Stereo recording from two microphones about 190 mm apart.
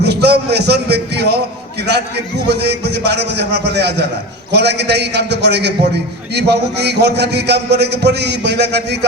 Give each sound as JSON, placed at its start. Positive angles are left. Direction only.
{"t": 0.0, "sound": "a man's voice", "side_deg": -60}